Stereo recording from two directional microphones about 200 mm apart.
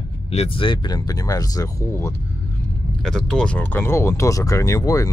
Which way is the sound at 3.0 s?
5° left (ahead or behind).